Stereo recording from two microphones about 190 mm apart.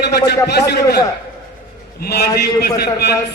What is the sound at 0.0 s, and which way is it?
A man's voice, 60° left (ahead or behind).